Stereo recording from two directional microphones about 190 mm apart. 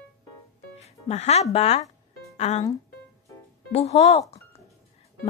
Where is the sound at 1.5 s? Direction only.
35° left (ahead or behind).